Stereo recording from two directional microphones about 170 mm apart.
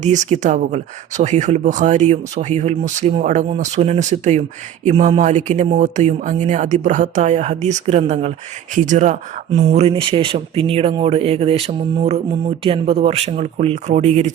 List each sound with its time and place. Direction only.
0.0 s speech: 45° right (ahead or behind)
9.7 s speech: 35° right (ahead or behind)